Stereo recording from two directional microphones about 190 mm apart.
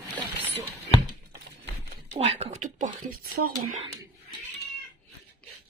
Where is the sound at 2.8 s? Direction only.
50° right (ahead or behind).